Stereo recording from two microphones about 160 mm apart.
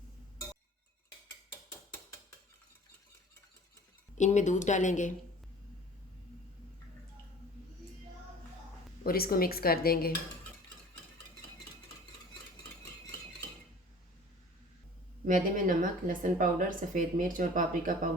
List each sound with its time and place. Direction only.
4.1 s speech: 50° left (ahead or behind)
9.0 s speech: 70° left (ahead or behind)
15.3 s speech: 55° right (ahead or behind)